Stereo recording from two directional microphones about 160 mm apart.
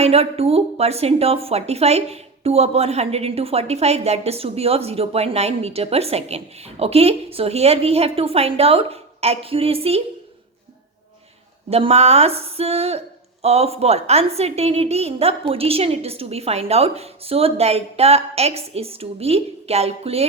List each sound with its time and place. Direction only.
0.0 s a woman's voice: 40° right (ahead or behind)
11.7 s a woman's voice: 40° right (ahead or behind)